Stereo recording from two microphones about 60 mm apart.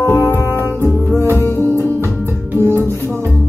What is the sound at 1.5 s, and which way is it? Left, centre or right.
Music, left.